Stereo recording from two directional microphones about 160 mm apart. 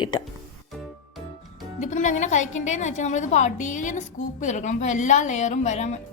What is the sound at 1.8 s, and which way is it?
A woman's voice, 50° left (ahead or behind).